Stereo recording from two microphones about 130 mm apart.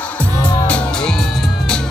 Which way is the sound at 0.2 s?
10° left (ahead or behind).